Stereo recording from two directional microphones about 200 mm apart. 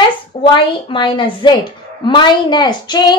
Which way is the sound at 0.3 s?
25° left (ahead or behind).